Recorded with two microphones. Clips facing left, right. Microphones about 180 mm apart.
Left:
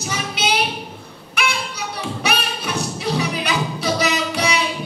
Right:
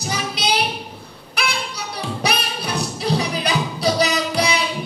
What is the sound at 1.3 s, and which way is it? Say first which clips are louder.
Music: left 1 dB; 35° right (ahead or behind).